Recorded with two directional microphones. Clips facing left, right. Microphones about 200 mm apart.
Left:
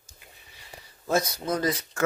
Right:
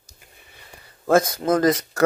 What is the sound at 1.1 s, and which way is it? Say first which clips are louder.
Speech: right 8 dB; 50° right (ahead or behind).